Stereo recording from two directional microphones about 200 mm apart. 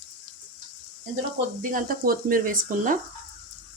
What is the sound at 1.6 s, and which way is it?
Speech, 40° right (ahead or behind).